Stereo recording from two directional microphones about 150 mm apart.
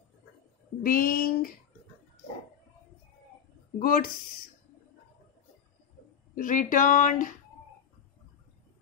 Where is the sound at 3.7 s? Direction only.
70° left (ahead or behind).